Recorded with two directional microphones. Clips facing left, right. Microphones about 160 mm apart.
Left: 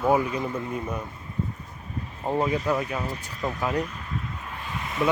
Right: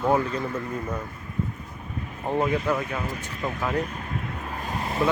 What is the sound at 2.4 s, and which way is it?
Speech, 35° left (ahead or behind).